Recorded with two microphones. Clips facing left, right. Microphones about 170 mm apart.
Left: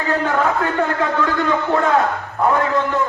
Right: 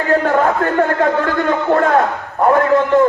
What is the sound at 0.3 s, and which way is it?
A man's voice, 50° right (ahead or behind).